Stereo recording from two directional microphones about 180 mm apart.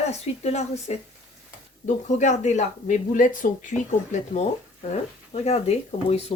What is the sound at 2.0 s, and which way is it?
Speech, 40° left (ahead or behind).